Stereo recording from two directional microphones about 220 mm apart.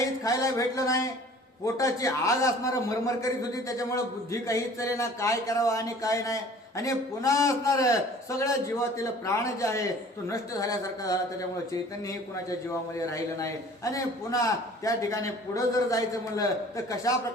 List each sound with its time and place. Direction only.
0.3 s a man's voice: 15° left (ahead or behind)
9.0 s a man's voice: 15° left (ahead or behind)